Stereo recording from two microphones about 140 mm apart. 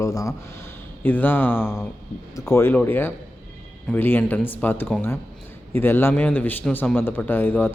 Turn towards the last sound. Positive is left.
turn(degrees=15)  # may be behind; listen again after turning